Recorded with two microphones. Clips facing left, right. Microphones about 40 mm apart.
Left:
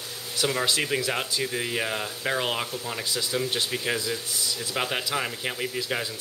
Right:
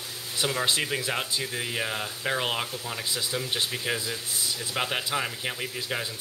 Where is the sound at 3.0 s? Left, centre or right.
Centre.